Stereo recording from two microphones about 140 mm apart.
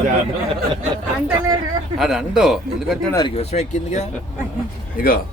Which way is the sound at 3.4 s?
50° left (ahead or behind).